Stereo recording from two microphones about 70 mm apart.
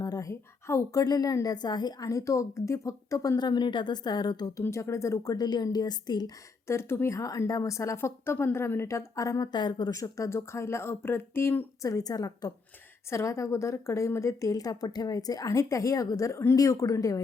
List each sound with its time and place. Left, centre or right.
0.0 s a sound: left
0.3 s a woman's voice: left
1.0 s a woman's voice: left
3.3 s a woman's voice: left
4.6 s a woman's voice: left
6.7 s a woman's voice: left
7.9 s a woman's voice: left
9.9 s speech: left
11.8 s a woman's voice: left
13.1 s a woman's voice: left